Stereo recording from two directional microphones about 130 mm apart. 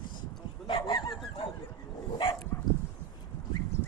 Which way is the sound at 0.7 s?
35° left (ahead or behind).